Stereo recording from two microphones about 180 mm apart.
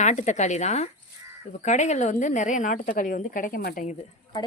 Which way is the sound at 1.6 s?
40° left (ahead or behind).